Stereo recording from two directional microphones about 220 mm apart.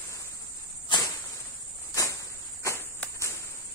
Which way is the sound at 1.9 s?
15° left (ahead or behind).